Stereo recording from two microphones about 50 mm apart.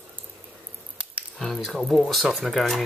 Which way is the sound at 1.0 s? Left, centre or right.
Right.